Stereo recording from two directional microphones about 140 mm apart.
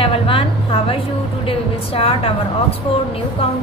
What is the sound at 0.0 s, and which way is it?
A woman's voice, 40° left (ahead or behind).